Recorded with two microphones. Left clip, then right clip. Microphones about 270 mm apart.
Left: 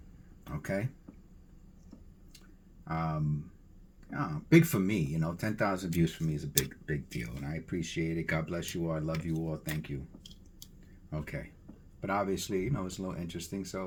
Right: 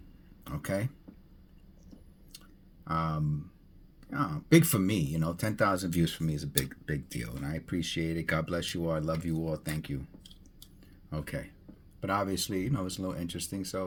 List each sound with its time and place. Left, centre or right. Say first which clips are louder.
0.4 s a sound: right 2 dB; right
2.8 s speech: right 3 dB; right
11.1 s speech: right 2 dB; right